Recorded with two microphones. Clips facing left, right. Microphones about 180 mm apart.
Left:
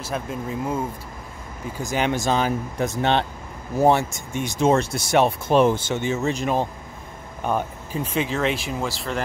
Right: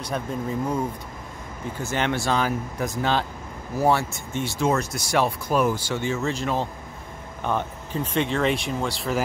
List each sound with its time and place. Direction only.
0.1 s speech: 5° left (ahead or behind)